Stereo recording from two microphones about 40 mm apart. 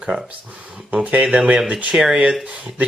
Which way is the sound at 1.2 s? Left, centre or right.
Right.